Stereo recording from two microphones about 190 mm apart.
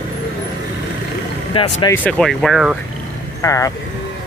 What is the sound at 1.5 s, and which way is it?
Speech, 25° left (ahead or behind).